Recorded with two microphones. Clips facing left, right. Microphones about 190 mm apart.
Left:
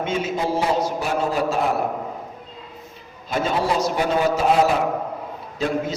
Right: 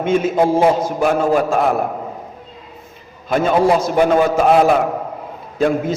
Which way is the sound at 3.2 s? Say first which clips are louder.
Right 8 dB; 55° right (ahead or behind).